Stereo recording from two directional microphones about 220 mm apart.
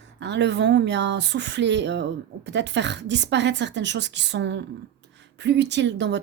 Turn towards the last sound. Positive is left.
turn(degrees=-55)  # may be behind; listen again after turning